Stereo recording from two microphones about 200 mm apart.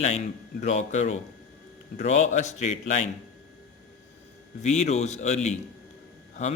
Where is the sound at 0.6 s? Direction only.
35° left (ahead or behind).